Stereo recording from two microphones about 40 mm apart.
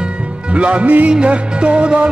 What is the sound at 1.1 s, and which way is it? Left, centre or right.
Music, right.